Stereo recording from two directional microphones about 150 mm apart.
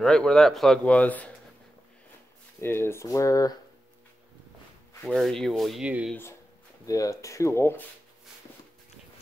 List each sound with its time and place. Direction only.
0.0 s a man's voice: 5° left (ahead or behind)
2.6 s speech: 15° left (ahead or behind)
5.0 s a man's voice: centre (ahead or behind)
6.9 s speech: 20° left (ahead or behind)